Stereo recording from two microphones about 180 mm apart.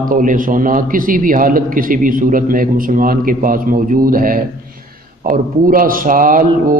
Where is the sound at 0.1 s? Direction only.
50° right (ahead or behind).